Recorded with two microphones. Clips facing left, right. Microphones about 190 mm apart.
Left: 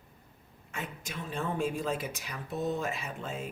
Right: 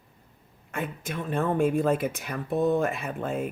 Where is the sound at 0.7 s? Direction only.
55° right (ahead or behind).